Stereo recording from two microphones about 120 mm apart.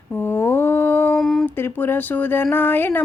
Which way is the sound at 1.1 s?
Centre (ahead or behind).